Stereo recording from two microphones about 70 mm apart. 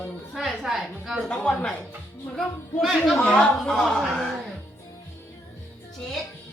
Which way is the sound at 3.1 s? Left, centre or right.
Centre.